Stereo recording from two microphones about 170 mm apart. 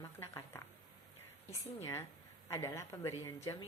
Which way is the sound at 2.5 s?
15° left (ahead or behind).